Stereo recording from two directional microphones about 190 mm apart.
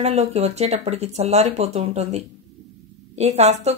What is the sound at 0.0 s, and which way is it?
A woman's voice, 35° right (ahead or behind).